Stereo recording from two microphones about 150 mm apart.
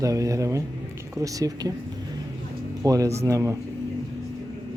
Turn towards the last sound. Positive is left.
turn(degrees=-20)  # may be behind; listen again after turning